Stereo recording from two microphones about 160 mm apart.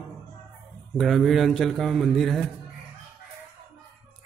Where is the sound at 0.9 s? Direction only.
Centre (ahead or behind).